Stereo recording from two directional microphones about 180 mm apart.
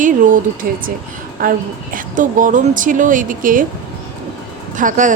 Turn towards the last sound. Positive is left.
turn(degrees=-45)  # may be behind; listen again after turning